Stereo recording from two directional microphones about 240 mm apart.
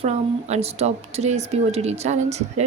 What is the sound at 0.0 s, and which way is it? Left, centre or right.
Speech, right.